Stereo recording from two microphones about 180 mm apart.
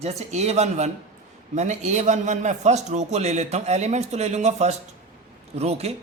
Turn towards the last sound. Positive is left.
turn(degrees=-35)  # may be behind; listen again after turning